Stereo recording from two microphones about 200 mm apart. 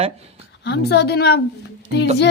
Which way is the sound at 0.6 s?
55° left (ahead or behind).